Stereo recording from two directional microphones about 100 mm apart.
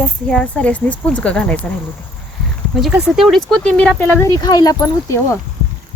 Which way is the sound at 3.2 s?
Centre (ahead or behind).